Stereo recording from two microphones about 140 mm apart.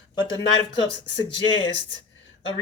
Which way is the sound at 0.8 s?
35° left (ahead or behind).